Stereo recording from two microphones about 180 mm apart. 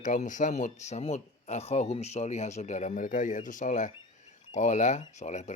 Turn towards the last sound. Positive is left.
turn(degrees=40)  # may be behind; listen again after turning